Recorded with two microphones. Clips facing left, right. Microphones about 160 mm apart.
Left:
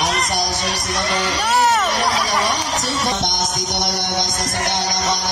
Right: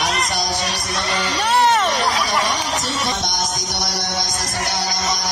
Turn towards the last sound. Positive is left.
turn(degrees=25)  # may be behind; listen again after turning